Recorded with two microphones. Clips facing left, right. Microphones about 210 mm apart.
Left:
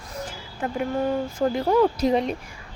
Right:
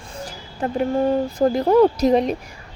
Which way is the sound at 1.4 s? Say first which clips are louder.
Right 5 dB; 35° right (ahead or behind).